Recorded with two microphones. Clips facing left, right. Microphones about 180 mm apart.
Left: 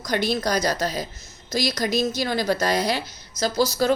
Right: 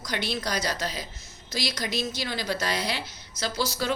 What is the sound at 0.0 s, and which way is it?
A woman's voice, 45° left (ahead or behind).